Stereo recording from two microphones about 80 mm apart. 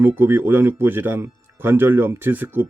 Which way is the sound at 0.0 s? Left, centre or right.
Right.